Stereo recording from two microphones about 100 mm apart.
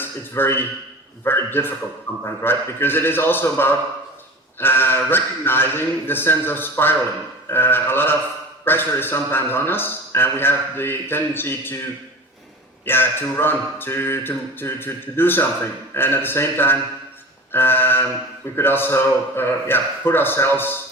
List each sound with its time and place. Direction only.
0.0 s a man's voice: 20° left (ahead or behind)
12.8 s a man's voice: 20° left (ahead or behind)